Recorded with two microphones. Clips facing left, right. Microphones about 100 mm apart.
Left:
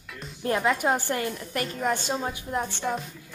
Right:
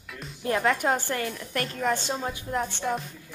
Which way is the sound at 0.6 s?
10° left (ahead or behind).